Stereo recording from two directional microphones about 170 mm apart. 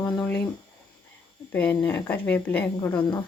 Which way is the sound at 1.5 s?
10° left (ahead or behind).